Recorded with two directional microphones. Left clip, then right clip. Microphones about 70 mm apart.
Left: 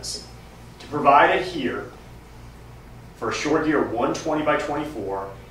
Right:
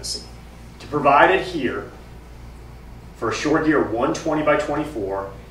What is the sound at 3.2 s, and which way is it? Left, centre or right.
Speech, centre.